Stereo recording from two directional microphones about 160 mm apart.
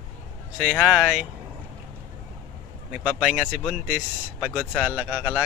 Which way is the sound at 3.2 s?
5° right (ahead or behind).